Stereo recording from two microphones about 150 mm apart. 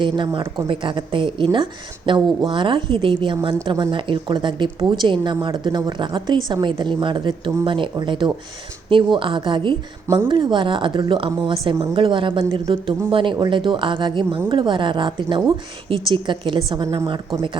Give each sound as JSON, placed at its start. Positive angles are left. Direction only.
{"t": 0.0, "sound": "a woman's voice", "side_deg": -30}